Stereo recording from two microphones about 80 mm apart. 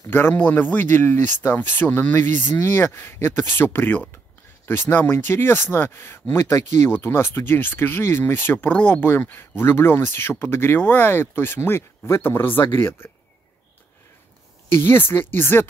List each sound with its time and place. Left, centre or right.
0.0 s speech: left
14.7 s speech: left